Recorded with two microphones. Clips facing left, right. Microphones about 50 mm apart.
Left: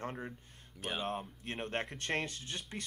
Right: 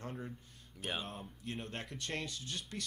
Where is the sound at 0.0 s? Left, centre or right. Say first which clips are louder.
Left 3 dB; left.